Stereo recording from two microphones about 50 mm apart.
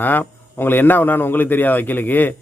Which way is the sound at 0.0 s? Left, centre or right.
Left.